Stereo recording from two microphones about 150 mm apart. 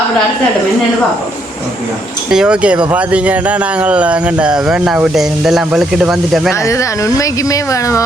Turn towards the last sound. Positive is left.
turn(degrees=20)  # may be behind; listen again after turning